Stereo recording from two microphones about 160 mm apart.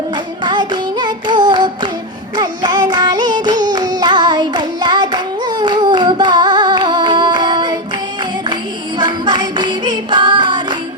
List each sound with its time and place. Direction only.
0.4 s music: 30° right (ahead or behind)
2.3 s carnatic music: 25° right (ahead or behind)
9.0 s music: 25° right (ahead or behind)